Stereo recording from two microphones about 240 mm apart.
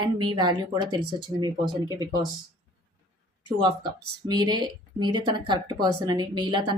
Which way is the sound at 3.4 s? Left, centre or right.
Centre.